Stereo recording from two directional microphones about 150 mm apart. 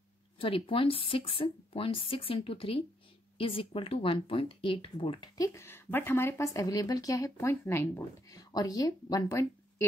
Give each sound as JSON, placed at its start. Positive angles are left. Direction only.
{"t": 0.4, "sound": "speech", "side_deg": 35}
{"t": 8.3, "sound": "speech", "side_deg": 25}